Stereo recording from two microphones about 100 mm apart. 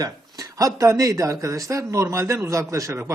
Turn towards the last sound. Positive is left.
turn(degrees=-30)  # may be behind; listen again after turning